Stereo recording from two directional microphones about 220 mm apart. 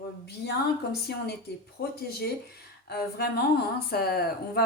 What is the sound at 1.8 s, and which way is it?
Speech, 45° left (ahead or behind).